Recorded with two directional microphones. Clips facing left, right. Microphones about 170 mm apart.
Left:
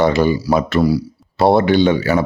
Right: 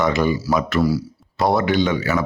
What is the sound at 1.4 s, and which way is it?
Speech, 30° left (ahead or behind).